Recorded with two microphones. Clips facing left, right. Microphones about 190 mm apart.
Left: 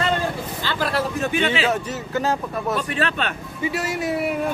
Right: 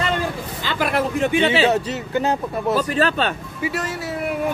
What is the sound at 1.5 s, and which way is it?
Speech, 30° right (ahead or behind).